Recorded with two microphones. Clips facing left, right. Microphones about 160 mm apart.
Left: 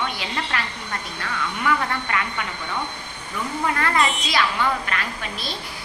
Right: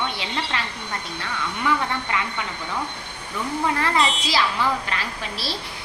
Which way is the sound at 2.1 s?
20° right (ahead or behind).